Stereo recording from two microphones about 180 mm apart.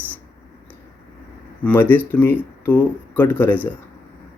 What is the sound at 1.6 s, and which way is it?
Speech, 10° left (ahead or behind).